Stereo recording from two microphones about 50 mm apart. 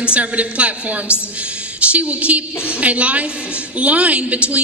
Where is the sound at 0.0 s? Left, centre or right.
Right.